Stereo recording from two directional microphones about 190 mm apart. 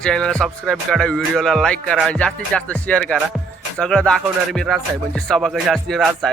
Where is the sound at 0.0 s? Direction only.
5° left (ahead or behind).